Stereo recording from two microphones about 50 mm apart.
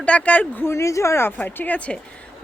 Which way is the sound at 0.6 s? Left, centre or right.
Left.